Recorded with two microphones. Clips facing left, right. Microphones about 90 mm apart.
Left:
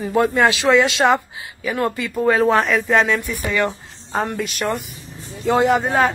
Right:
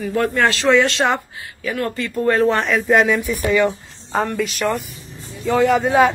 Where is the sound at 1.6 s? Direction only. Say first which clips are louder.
Left 1 dB; 15° left (ahead or behind).